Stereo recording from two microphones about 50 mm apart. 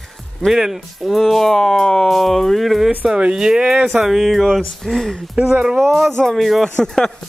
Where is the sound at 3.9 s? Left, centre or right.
Centre.